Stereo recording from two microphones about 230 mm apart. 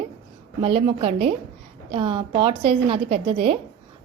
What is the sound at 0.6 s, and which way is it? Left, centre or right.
A woman's voice, right.